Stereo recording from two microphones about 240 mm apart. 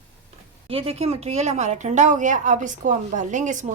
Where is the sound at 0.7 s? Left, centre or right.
Right.